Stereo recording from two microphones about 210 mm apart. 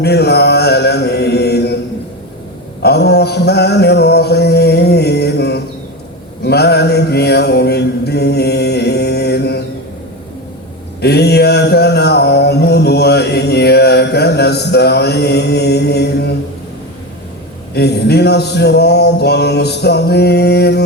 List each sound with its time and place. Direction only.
0.0 s mantra: 50° left (ahead or behind)
2.8 s mantra: 50° left (ahead or behind)
11.0 s mantra: 50° left (ahead or behind)
17.7 s a sound: 50° left (ahead or behind)